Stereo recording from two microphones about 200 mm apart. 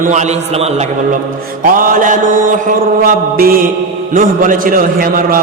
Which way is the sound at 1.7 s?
45° right (ahead or behind).